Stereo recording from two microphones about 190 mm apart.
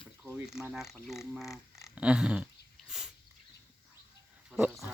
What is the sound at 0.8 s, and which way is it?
Speech, 15° left (ahead or behind).